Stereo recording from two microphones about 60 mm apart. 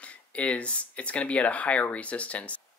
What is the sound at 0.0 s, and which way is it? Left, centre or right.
Speech, centre.